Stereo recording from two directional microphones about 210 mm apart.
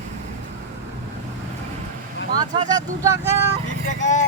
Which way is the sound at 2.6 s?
15° right (ahead or behind).